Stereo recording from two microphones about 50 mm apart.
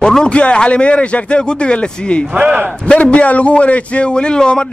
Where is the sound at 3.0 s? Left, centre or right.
Left.